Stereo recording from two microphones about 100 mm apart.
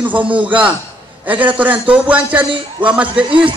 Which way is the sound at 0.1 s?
15° right (ahead or behind).